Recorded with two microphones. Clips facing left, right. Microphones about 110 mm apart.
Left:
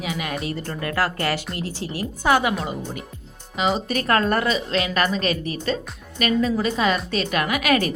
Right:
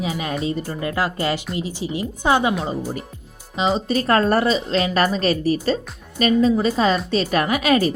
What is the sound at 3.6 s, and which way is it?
Speech, 25° right (ahead or behind).